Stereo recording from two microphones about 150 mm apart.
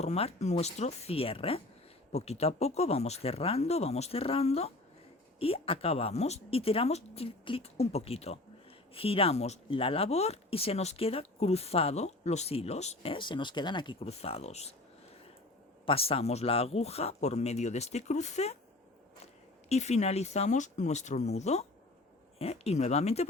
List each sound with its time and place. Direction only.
0.0 s speech: 45° left (ahead or behind)
15.9 s speech: 40° left (ahead or behind)